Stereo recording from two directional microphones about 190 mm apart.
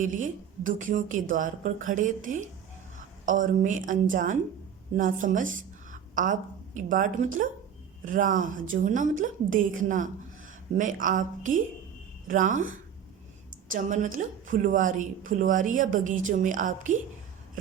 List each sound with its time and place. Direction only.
0.0 s a woman's voice: 45° right (ahead or behind)